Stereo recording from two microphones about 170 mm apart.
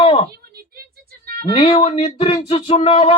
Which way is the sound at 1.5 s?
30° left (ahead or behind).